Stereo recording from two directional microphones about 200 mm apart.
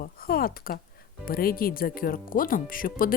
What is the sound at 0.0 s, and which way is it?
Speech, 45° left (ahead or behind).